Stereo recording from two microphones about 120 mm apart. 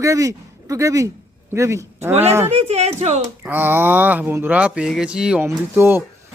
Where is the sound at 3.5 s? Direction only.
15° right (ahead or behind).